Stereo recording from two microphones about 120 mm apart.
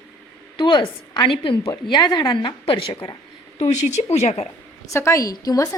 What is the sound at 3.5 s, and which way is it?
Speech, 70° left (ahead or behind).